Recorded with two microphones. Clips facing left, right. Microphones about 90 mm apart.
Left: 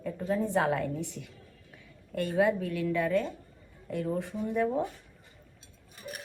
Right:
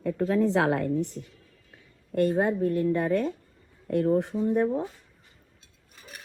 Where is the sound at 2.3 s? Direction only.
40° right (ahead or behind).